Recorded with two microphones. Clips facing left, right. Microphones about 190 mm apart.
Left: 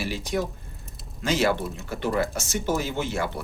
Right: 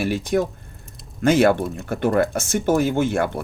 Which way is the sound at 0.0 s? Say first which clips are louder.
Right 7 dB; 55° right (ahead or behind).